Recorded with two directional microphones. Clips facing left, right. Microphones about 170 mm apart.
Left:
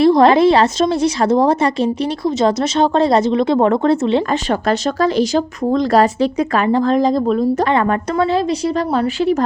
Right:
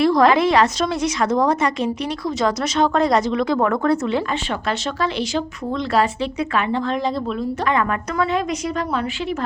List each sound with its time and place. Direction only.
0.0 s a woman's voice: 30° left (ahead or behind)
4.9 s speech: 40° left (ahead or behind)